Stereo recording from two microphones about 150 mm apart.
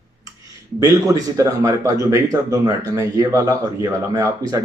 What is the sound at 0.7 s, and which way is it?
Speech, 25° right (ahead or behind).